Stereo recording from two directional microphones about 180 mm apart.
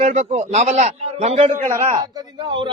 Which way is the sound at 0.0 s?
35° right (ahead or behind).